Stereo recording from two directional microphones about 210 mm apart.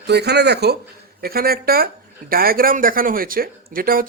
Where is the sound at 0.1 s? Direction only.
50° right (ahead or behind).